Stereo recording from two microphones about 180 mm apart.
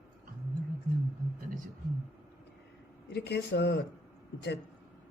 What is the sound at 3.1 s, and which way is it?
Speech, 70° left (ahead or behind).